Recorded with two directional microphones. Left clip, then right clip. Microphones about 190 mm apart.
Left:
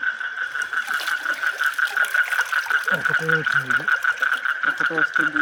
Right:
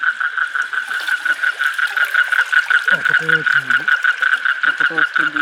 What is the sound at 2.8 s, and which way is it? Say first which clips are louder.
Frog: right 6 dB; 35° left (ahead or behind).